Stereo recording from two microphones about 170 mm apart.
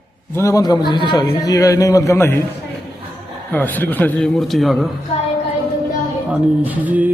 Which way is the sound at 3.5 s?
10° left (ahead or behind).